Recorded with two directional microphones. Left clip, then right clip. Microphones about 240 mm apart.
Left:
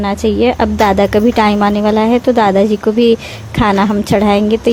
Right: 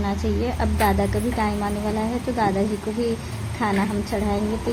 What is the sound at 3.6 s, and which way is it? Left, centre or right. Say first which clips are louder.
Speech: left 12 dB; left.